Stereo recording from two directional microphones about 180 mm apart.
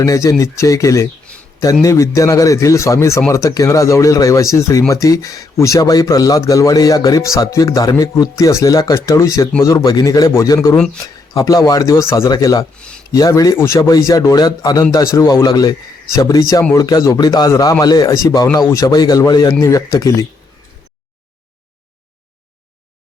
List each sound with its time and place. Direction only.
0.0 s a man's voice: 20° left (ahead or behind)